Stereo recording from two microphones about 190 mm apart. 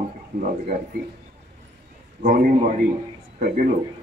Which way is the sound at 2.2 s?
45° right (ahead or behind).